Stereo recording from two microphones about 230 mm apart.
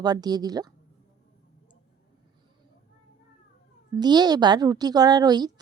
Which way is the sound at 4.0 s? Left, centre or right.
Centre.